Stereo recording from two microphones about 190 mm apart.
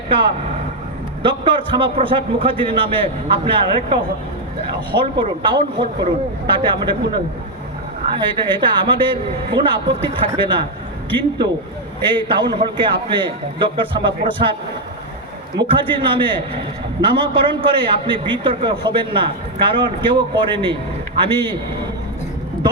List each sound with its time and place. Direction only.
1.2 s a man's voice: 25° right (ahead or behind)
8.1 s a man's voice: 25° right (ahead or behind)
12.0 s a man's voice: 25° right (ahead or behind)
15.5 s a man's voice: 25° right (ahead or behind)